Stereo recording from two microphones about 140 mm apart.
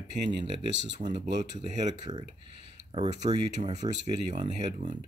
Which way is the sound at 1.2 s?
55° right (ahead or behind).